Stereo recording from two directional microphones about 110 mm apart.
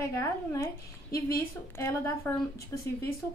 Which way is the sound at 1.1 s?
25° left (ahead or behind).